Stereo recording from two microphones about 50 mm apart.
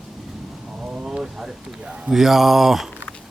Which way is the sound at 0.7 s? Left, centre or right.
Centre.